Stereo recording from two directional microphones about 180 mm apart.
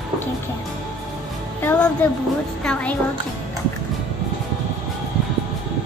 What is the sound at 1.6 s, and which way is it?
Speech, 10° left (ahead or behind).